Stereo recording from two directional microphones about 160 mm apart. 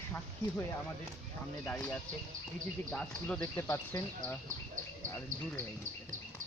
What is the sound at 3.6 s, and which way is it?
Speech, 15° left (ahead or behind).